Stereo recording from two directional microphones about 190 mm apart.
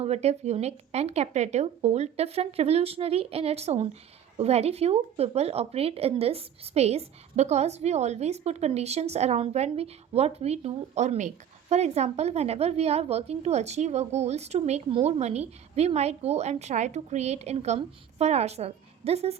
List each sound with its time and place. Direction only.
0.0 s a woman's voice: 35° right (ahead or behind)